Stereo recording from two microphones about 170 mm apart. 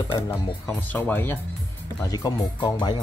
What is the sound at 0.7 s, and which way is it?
Speech, 10° left (ahead or behind).